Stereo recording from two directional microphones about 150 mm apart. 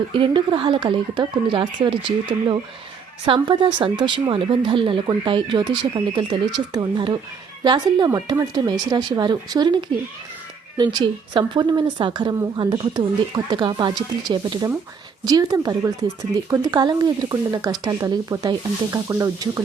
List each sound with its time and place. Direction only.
0.1 s a woman's voice: 35° right (ahead or behind)